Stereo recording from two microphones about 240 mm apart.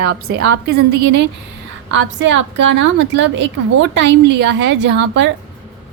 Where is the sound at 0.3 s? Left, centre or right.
Right.